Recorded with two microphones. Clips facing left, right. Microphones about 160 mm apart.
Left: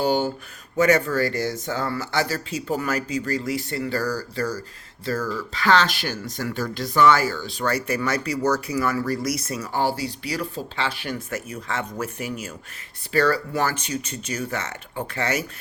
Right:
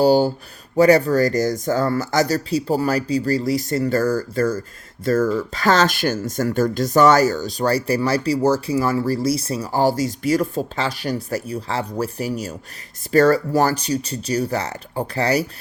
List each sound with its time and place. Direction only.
0.0 s speech: 35° right (ahead or behind)